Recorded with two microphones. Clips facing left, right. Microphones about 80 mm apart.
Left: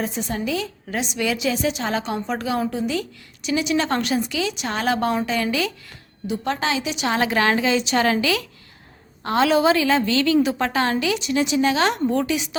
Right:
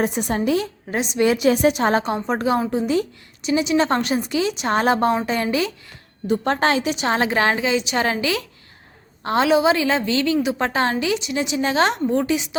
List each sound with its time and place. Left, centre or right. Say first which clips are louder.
0.0 s a woman's voice: right 5 dB; right
1.5 s a woman's voice: right 6 dB; right
6.2 s a woman's voice: right 5 dB; right; by 10.7 s centre
10.7 s a woman's voice: right 1 dB; right